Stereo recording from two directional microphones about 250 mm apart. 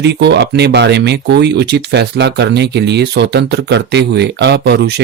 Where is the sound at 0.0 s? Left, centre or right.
Right.